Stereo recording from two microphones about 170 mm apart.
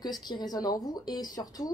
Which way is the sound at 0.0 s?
25° left (ahead or behind).